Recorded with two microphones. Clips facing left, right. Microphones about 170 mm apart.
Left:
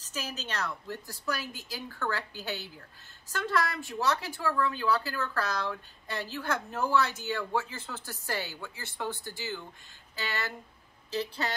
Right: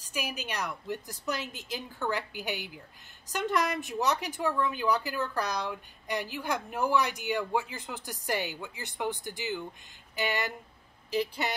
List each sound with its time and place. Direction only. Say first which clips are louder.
0.0 s a woman's voice: right 2 dB; 15° right (ahead or behind)